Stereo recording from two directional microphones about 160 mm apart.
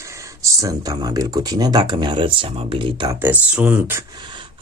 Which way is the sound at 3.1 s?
10° right (ahead or behind).